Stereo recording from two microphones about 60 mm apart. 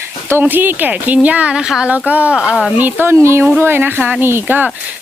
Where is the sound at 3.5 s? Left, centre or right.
Right.